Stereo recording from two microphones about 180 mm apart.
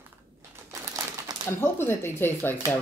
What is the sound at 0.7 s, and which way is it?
Crumpling, 20° right (ahead or behind).